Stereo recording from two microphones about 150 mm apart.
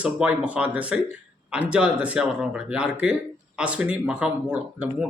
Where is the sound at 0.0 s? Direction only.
10° right (ahead or behind).